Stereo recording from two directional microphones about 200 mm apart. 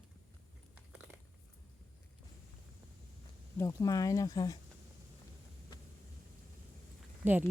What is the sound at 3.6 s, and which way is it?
Speech, 15° left (ahead or behind).